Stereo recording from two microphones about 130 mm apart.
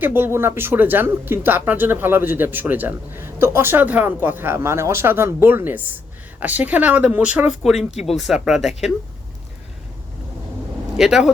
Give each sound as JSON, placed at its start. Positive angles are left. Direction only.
{"t": 0.0, "sound": "speech", "side_deg": -15}
{"t": 10.9, "sound": "speech", "side_deg": -5}